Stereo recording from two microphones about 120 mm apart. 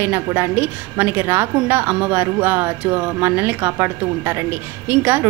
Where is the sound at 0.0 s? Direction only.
20° right (ahead or behind).